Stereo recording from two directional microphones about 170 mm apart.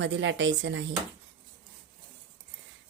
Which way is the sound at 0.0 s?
90° right.